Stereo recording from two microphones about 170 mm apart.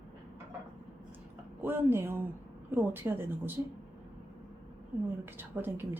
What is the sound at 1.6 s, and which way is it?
A woman's voice, 15° right (ahead or behind).